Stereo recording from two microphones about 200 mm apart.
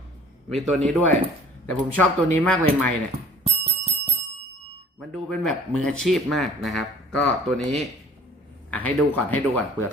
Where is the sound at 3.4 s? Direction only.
30° right (ahead or behind).